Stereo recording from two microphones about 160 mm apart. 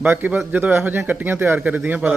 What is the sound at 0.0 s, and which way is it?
Speech, 10° right (ahead or behind).